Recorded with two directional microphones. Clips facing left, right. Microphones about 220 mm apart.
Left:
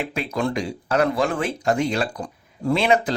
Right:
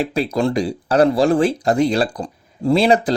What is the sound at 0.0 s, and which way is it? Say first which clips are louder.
Speech: right 6 dB; 35° right (ahead or behind).